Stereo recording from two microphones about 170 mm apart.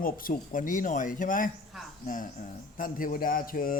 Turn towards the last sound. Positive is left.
turn(degrees=55)  # may be behind; listen again after turning